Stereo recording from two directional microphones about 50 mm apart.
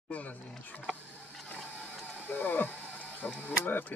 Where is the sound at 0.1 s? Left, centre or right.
Left.